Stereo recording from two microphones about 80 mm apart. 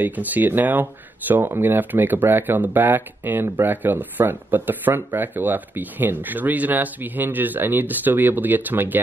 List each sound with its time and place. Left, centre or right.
0.0 s speech: right